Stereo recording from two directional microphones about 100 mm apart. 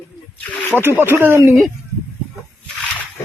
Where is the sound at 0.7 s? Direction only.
20° right (ahead or behind).